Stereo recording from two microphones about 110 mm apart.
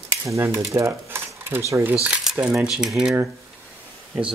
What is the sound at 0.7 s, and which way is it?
Speech, 25° right (ahead or behind).